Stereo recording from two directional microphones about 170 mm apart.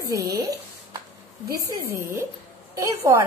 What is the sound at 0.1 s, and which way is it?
A woman's voice, 20° right (ahead or behind).